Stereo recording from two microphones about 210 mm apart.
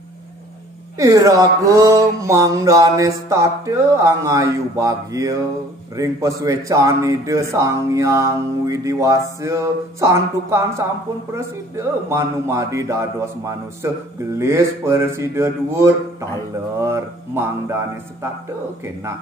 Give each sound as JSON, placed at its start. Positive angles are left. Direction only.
{"t": 0.9, "sound": "speech", "side_deg": -15}